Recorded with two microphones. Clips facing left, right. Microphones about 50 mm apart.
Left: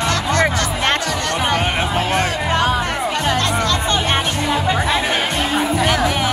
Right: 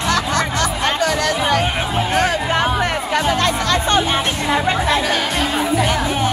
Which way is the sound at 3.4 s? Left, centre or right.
Right.